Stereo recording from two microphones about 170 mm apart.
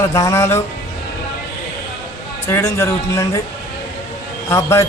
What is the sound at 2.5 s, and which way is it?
Speech, 15° left (ahead or behind).